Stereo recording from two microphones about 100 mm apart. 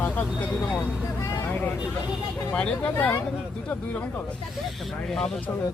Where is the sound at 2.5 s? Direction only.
15° left (ahead or behind).